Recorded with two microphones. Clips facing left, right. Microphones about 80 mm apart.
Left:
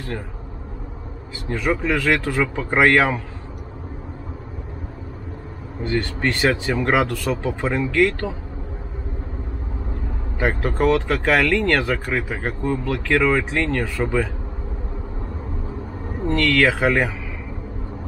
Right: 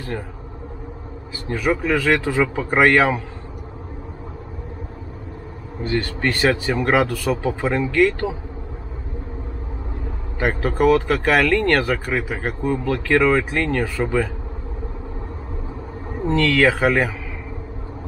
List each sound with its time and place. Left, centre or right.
1.5 s speech: centre
5.8 s speech: centre
10.4 s speech: centre
16.3 s speech: centre
16.6 s speech: centre